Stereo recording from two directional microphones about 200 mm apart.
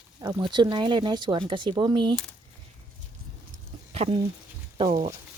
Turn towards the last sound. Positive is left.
turn(degrees=-20)  # may be behind; listen again after turning